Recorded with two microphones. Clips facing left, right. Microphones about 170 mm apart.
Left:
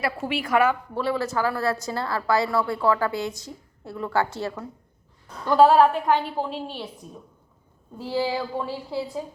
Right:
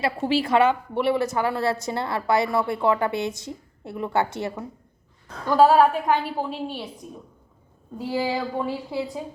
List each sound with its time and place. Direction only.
0.0 s a woman's voice: 30° right (ahead or behind)
5.5 s a woman's voice: 5° right (ahead or behind)
7.9 s a woman's voice: 15° right (ahead or behind)